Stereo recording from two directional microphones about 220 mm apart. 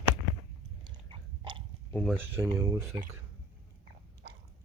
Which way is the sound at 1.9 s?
5° left (ahead or behind).